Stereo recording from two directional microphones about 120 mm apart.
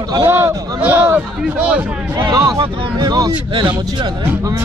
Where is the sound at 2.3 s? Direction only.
30° right (ahead or behind).